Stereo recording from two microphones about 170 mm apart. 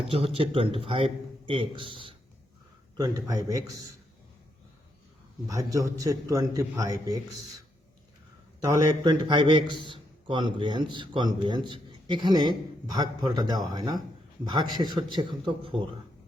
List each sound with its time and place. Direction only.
0.3 s a man's voice: 35° right (ahead or behind)
3.0 s a man's voice: 20° right (ahead or behind)
5.5 s a man's voice: 20° right (ahead or behind)
8.6 s a man's voice: 20° right (ahead or behind)